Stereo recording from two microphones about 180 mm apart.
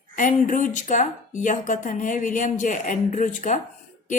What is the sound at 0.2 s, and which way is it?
A woman's voice, 45° left (ahead or behind).